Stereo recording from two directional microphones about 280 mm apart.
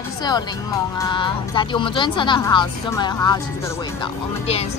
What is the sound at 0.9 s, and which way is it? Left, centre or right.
Speech, centre.